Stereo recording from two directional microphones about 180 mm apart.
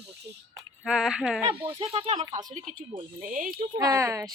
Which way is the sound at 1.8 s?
30° right (ahead or behind).